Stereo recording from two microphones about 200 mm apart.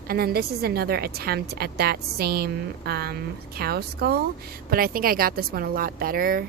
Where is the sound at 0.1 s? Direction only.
50° right (ahead or behind).